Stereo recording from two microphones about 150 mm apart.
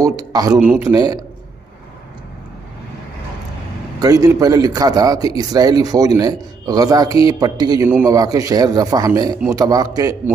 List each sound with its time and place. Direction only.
0.3 s a man's voice: 25° right (ahead or behind)
4.0 s a man's voice: 25° right (ahead or behind)